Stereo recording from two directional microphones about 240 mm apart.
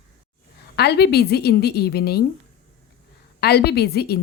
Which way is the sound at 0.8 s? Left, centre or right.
Left.